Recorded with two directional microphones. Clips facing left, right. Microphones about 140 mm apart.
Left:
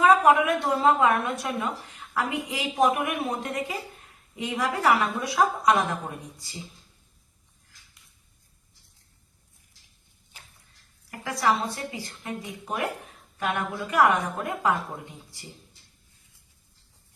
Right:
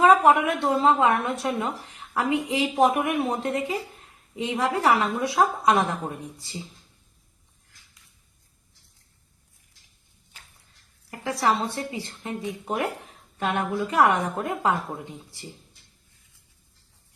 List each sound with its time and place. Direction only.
0.0 s a woman's voice: 30° right (ahead or behind)
11.1 s a woman's voice: 30° right (ahead or behind)